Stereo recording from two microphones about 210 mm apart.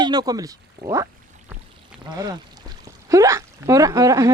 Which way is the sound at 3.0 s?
15° right (ahead or behind).